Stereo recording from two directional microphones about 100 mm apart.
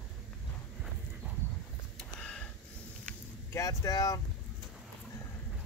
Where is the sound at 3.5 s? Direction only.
35° left (ahead or behind).